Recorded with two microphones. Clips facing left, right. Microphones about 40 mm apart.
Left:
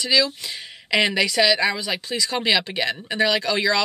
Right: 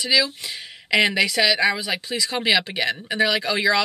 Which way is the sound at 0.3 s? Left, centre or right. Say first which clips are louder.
Even; centre.